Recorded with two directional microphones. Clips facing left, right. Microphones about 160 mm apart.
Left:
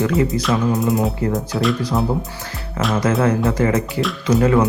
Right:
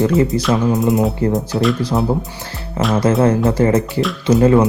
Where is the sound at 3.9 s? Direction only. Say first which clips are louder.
Right 3 dB; centre (ahead or behind).